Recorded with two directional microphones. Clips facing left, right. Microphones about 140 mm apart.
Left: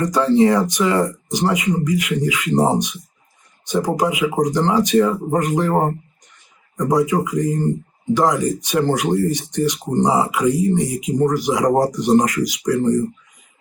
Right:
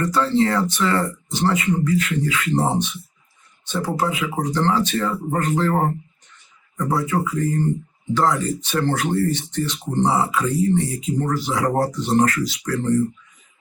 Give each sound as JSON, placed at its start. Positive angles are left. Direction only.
{"t": 0.0, "sound": "speech", "side_deg": 15}